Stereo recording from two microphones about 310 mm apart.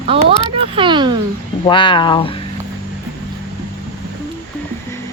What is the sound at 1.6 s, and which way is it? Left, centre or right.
Speech, centre.